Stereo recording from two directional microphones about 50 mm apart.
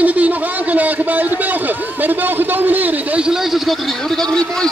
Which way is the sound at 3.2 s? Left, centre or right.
Centre.